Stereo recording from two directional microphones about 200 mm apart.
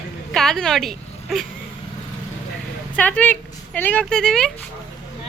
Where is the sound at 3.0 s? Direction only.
10° left (ahead or behind).